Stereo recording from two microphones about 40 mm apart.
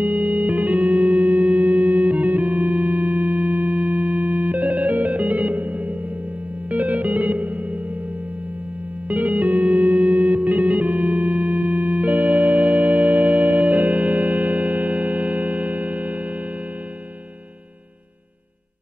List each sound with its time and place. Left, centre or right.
0.0 s music: right
9.1 s music: right